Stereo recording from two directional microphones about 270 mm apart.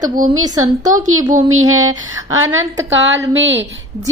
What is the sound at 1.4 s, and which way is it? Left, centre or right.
Speech, right.